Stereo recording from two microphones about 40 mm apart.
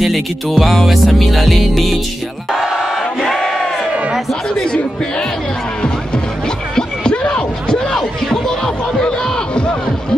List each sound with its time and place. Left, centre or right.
0.0 s music: centre
3.2 s battle cry: centre
7.1 s music: left
7.7 s a sound: centre